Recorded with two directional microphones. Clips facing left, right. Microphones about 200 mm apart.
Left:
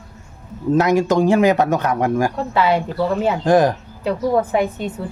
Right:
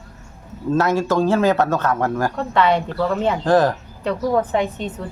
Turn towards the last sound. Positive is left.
turn(degrees=10)  # may be behind; listen again after turning